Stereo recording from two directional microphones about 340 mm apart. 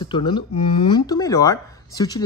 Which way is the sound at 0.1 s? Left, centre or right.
Centre.